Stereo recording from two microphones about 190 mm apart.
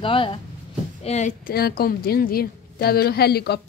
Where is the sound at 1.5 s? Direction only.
55° left (ahead or behind).